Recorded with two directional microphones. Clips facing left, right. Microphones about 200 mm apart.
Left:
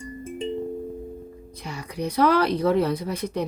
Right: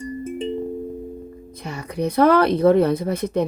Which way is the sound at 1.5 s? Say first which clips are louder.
Right 5 dB; 55° right (ahead or behind).